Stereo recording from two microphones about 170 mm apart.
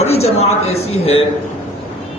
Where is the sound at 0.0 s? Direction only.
40° left (ahead or behind).